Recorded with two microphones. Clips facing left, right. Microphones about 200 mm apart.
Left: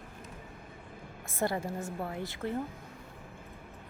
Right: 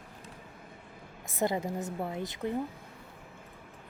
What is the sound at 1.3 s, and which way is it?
Speech, 20° right (ahead or behind).